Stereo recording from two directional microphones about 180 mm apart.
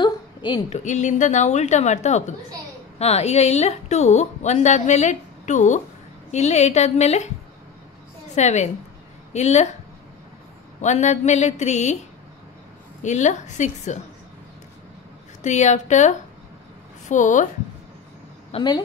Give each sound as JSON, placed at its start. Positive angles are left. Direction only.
{"t": 0.0, "sound": "a sound", "side_deg": 25}
{"t": 0.7, "sound": "a woman's voice", "side_deg": 40}
{"t": 8.4, "sound": "a woman's voice", "side_deg": 40}
{"t": 10.8, "sound": "a woman's voice", "side_deg": 40}
{"t": 13.0, "sound": "a woman's voice", "side_deg": 40}
{"t": 15.4, "sound": "a woman's voice", "side_deg": 40}
{"t": 18.5, "sound": "a woman's voice", "side_deg": 25}